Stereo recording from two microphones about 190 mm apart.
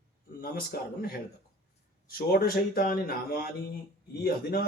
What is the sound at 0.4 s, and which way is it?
A man's voice, 50° left (ahead or behind).